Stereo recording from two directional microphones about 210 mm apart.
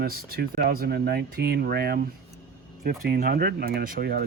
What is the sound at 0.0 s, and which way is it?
Speech, 45° right (ahead or behind).